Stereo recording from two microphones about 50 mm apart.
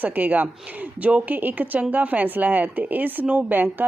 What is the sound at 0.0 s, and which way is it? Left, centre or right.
A woman's voice, right.